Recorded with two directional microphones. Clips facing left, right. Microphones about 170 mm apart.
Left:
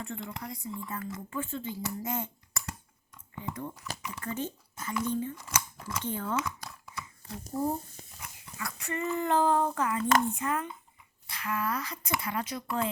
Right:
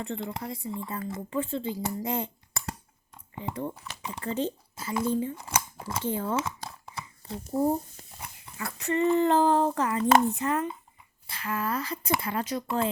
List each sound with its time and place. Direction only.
0.1 s speech: 25° right (ahead or behind)
0.6 s speech: 55° right (ahead or behind)
0.9 s speech: 30° right (ahead or behind)
6.1 s a sound: 25° right (ahead or behind)
8.2 s speech: 30° right (ahead or behind)